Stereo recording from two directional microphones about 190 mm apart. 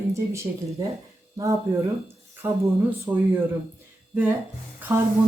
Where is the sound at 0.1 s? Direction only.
15° right (ahead or behind).